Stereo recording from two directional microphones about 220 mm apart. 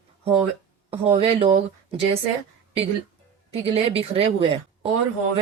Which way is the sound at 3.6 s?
25° right (ahead or behind).